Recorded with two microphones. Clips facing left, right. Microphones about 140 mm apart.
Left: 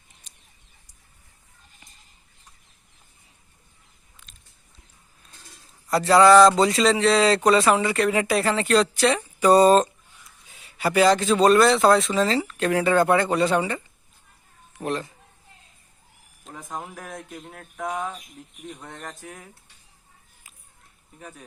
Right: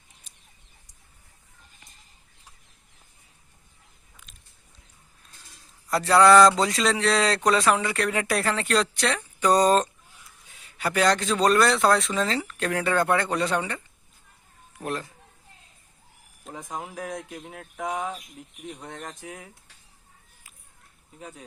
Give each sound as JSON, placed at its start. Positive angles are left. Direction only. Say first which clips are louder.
{"t": 5.9, "sound": "speech", "louder": "left 2 dB", "side_deg": 0}
{"t": 16.6, "sound": "speech", "louder": "even", "side_deg": -15}
{"t": 16.8, "sound": "speech", "louder": "right 3 dB", "side_deg": -5}
{"t": 19.2, "sound": "speech", "louder": "right 1 dB", "side_deg": -15}
{"t": 21.2, "sound": "speech", "louder": "right 1 dB", "side_deg": -20}